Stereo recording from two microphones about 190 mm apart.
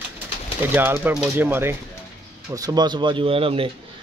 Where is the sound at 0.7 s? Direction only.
10° right (ahead or behind).